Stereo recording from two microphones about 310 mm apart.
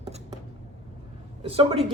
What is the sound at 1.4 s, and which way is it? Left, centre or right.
Speech, centre.